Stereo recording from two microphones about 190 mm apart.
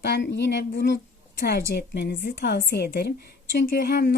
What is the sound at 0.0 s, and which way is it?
Speech, 60° left (ahead or behind).